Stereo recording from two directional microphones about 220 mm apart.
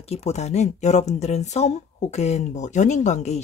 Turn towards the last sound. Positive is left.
turn(degrees=30)  # may be behind; listen again after turning